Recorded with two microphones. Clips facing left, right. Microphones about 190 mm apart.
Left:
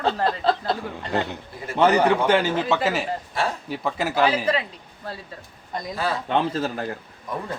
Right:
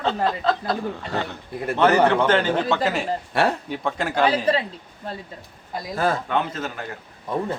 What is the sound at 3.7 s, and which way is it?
Speech, 5° left (ahead or behind).